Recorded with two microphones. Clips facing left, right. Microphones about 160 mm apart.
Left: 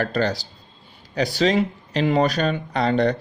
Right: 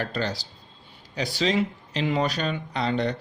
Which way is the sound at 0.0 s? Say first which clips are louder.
Left 6 dB; 50° left (ahead or behind).